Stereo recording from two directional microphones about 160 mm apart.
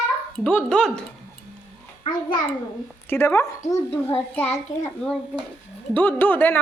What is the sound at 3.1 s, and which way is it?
A woman's voice, 15° left (ahead or behind).